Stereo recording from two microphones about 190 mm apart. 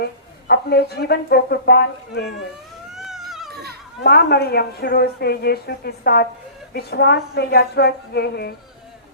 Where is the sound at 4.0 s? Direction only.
60° left (ahead or behind).